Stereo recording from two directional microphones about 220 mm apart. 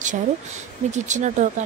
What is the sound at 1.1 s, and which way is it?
Speech, 35° right (ahead or behind).